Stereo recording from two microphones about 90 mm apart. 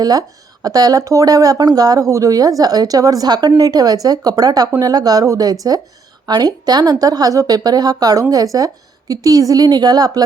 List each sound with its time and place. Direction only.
0.0 s speech: 45° right (ahead or behind)